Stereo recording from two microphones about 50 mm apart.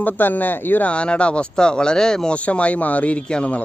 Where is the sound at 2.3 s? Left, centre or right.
Left.